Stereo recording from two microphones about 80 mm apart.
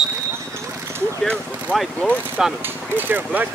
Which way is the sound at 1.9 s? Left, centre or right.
Centre.